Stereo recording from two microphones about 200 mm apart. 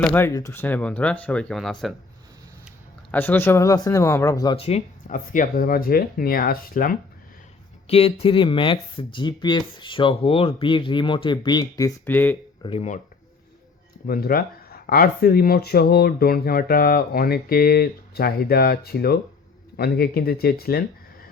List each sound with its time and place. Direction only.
0.0 s speech: 10° left (ahead or behind)
3.1 s speech: 10° left (ahead or behind)
4.5 s speech: 30° left (ahead or behind)
7.9 s speech: 30° left (ahead or behind); by 12.4 s 10° left (ahead or behind)
12.6 s speech: 30° left (ahead or behind)
14.1 s speech: 45° left (ahead or behind)